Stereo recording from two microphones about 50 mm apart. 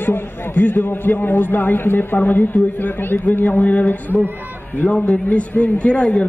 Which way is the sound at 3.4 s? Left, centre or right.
Left.